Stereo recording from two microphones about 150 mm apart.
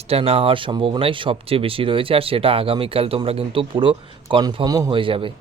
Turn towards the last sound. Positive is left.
turn(degrees=-35)  # may be behind; listen again after turning